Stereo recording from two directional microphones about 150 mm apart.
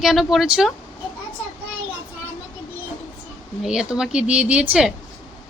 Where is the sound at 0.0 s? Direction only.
Centre (ahead or behind).